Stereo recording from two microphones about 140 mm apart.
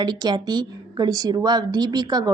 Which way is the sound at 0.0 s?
30° right (ahead or behind).